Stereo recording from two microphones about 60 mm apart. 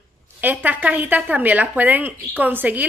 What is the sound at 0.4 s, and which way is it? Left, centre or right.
Speech, right.